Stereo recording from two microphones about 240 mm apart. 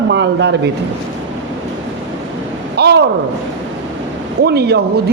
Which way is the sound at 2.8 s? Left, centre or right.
Right.